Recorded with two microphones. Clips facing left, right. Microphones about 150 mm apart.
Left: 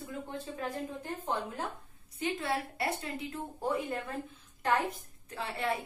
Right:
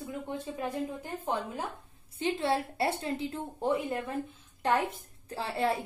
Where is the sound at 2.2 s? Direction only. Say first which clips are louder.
Right 4 dB; 30° right (ahead or behind).